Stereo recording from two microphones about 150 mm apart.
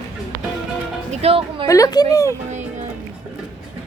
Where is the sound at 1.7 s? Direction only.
25° left (ahead or behind).